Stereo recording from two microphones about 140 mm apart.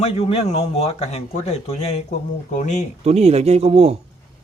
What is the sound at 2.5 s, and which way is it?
Speech, 60° left (ahead or behind).